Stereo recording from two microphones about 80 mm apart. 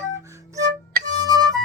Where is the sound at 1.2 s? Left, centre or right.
Right.